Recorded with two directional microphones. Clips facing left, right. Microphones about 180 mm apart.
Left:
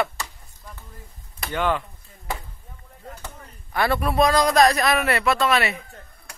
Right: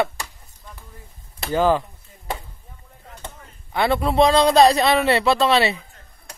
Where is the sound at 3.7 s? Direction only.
20° right (ahead or behind).